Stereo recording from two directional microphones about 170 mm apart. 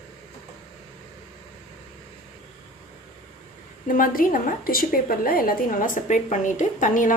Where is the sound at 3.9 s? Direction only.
55° left (ahead or behind).